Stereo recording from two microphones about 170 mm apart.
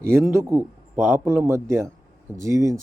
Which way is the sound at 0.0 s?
15° right (ahead or behind).